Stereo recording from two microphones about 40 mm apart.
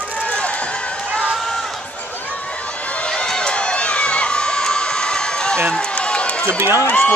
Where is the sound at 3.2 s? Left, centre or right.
Left.